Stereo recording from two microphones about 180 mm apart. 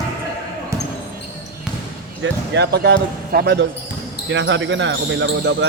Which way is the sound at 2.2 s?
75° right (ahead or behind).